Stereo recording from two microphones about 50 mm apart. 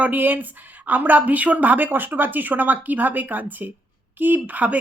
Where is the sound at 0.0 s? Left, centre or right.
Right.